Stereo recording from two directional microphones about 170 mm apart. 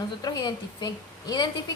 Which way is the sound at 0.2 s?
25° left (ahead or behind).